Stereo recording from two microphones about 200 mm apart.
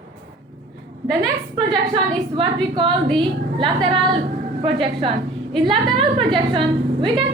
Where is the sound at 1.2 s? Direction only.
25° right (ahead or behind).